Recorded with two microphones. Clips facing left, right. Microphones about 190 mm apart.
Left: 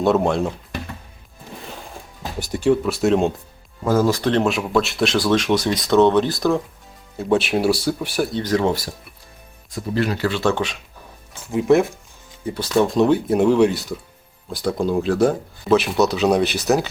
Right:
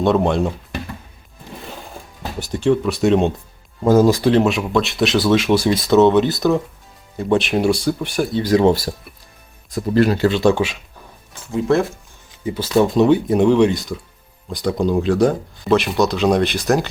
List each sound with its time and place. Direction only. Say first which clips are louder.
0.0 s speech: right 1 dB; 5° left (ahead or behind)
2.4 s speech: right 1 dB; 10° left (ahead or behind)
3.8 s speech: right 5 dB; 15° right (ahead or behind); by 8.4 s 5° left (ahead or behind)
8.4 s speech: right 6 dB; 10° right (ahead or behind)
9.7 s speech: right 6 dB; 40° right (ahead or behind)
10.2 s speech: right 5 dB; 20° right (ahead or behind)
11.5 s speech: left 1 dB; 20° left (ahead or behind)
12.5 s speech: right 2 dB; 5° right (ahead or behind)